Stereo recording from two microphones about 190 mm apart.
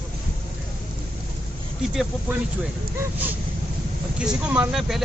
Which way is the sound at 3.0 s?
10° right (ahead or behind).